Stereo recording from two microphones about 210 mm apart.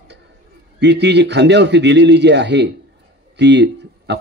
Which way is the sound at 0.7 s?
55° right (ahead or behind).